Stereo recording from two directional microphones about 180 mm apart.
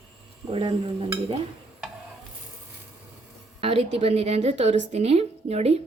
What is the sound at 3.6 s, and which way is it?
A woman's voice, 35° right (ahead or behind).